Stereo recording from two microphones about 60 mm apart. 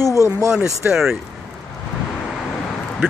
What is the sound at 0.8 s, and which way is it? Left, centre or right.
Speech, right.